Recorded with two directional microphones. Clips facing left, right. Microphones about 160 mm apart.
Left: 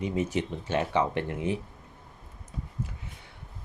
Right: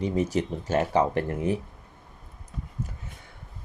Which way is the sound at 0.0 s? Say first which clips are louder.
Right 3 dB; 40° right (ahead or behind).